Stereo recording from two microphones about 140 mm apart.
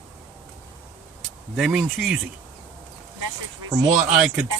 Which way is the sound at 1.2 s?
Centre (ahead or behind).